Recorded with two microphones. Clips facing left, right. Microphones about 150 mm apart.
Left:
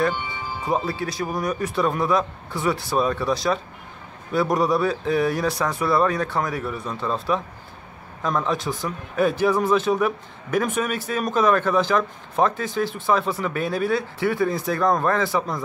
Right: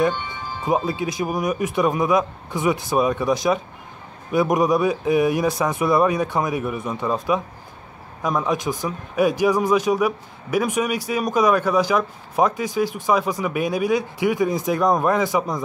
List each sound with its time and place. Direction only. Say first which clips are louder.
0.1 s music: even; 10° left (ahead or behind)
0.7 s a man's voice: right 3 dB; 15° right (ahead or behind)